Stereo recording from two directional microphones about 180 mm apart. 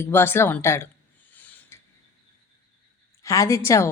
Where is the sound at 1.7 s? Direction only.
15° left (ahead or behind).